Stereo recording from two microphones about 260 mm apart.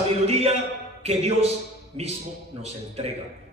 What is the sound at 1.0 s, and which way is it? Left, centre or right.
Speech, right.